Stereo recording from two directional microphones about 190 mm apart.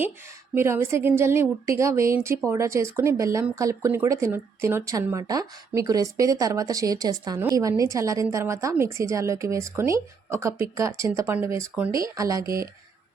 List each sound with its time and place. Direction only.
0.5 s a woman's voice: 15° right (ahead or behind)